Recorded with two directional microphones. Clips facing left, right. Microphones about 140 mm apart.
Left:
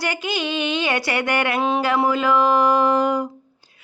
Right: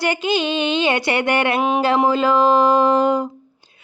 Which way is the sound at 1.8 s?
30° right (ahead or behind).